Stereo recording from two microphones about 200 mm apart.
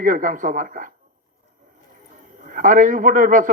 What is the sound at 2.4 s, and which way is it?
A man's voice, 40° right (ahead or behind).